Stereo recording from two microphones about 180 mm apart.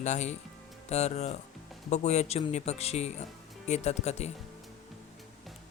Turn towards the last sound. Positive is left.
turn(degrees=40)  # may be behind; listen again after turning